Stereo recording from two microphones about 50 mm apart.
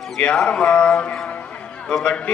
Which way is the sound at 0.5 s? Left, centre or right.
Left.